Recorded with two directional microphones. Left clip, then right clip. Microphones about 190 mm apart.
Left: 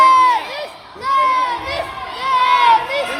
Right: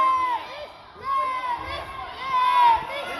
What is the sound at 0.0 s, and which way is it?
Crowd, 50° left (ahead or behind).